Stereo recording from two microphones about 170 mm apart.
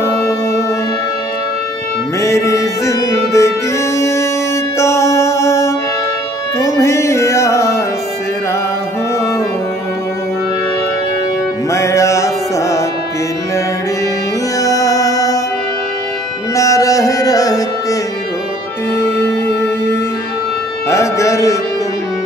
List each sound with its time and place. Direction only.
0.0 s music: 15° left (ahead or behind)
2.1 s music: 15° left (ahead or behind)
11.7 s music: 15° left (ahead or behind)
14.6 s music: 20° left (ahead or behind)
16.5 s music: 20° left (ahead or behind)
19.0 s music: 15° left (ahead or behind)